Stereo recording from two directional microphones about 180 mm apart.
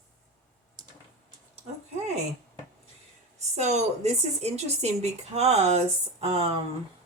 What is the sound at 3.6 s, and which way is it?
Speech, 40° right (ahead or behind).